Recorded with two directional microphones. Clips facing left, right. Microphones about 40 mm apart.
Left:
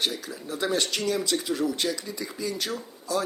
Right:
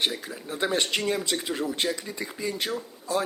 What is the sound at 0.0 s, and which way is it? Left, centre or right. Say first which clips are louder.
Speech: right 1 dB; right.